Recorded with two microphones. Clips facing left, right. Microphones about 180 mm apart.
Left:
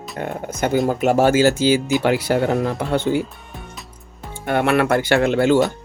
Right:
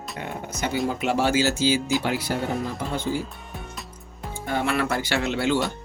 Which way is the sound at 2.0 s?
70° left (ahead or behind).